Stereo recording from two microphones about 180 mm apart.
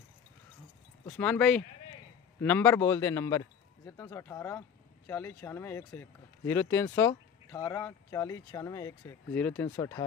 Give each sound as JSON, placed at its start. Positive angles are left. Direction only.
{"t": 1.0, "sound": "a man's voice", "side_deg": 10}